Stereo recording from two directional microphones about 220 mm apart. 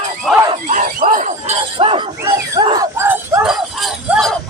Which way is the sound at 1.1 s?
35° right (ahead or behind).